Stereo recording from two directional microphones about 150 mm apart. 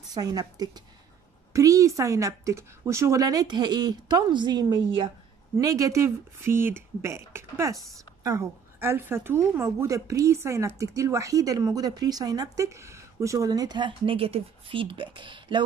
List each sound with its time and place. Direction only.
0.1 s a woman's voice: 25° right (ahead or behind)